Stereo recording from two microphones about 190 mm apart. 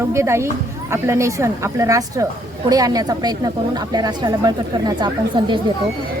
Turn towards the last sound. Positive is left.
turn(degrees=-25)  # may be behind; listen again after turning